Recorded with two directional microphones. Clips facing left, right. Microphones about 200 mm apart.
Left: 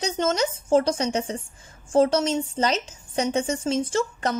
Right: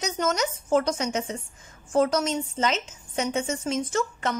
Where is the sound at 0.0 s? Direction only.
30° left (ahead or behind).